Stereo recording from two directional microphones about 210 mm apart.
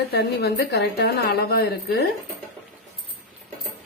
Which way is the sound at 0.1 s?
50° left (ahead or behind).